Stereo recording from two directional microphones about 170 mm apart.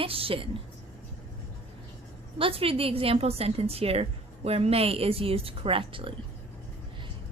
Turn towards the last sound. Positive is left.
turn(degrees=-30)  # may be behind; listen again after turning